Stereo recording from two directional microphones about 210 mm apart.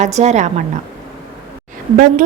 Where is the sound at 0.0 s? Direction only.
30° right (ahead or behind).